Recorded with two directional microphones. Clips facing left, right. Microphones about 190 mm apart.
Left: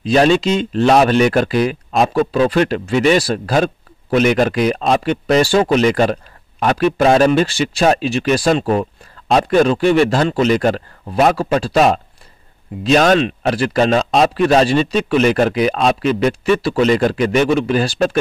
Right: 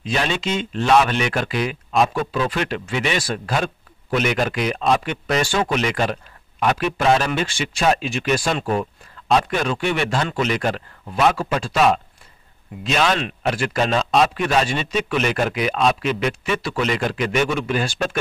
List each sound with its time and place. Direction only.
0.0 s speech: 35° left (ahead or behind)